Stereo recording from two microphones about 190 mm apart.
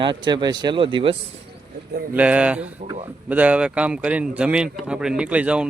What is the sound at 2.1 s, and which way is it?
A man's voice, 5° right (ahead or behind).